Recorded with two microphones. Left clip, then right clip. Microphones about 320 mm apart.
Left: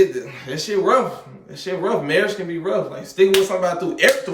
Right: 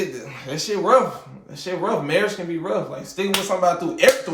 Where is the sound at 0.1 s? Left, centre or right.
Centre.